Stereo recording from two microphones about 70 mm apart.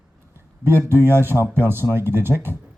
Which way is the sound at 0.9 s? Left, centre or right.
Right.